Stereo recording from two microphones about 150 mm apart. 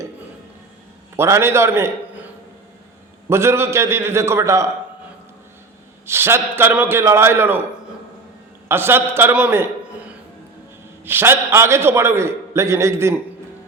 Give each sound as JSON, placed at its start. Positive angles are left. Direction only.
{"t": 1.1, "sound": "a man's voice", "side_deg": -15}
{"t": 3.2, "sound": "a man's voice", "side_deg": -15}
{"t": 6.1, "sound": "a man's voice", "side_deg": -15}
{"t": 8.6, "sound": "a man's voice", "side_deg": -15}
{"t": 11.0, "sound": "a man's voice", "side_deg": -15}